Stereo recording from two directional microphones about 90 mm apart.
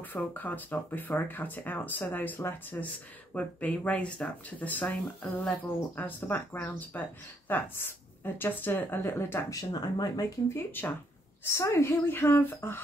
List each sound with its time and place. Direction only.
0.1 s speech: 20° left (ahead or behind)
9.6 s speech: 50° left (ahead or behind)
10.5 s speech: 20° left (ahead or behind)